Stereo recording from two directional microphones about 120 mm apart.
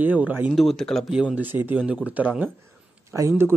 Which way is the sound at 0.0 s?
15° right (ahead or behind).